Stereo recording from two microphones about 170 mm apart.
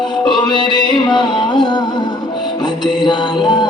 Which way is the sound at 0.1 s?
25° left (ahead or behind).